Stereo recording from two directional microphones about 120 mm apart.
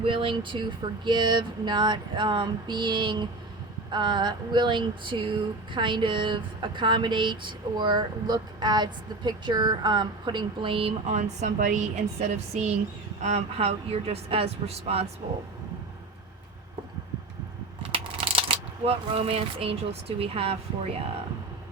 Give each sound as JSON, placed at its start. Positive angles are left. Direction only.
{"t": 0.0, "sound": "a sound", "side_deg": -45}
{"t": 11.2, "sound": "a woman's voice", "side_deg": -85}
{"t": 13.2, "sound": "speech", "side_deg": -65}
{"t": 17.9, "sound": "speech", "side_deg": -50}